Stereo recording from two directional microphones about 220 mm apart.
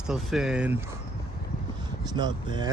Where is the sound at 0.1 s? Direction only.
Centre (ahead or behind).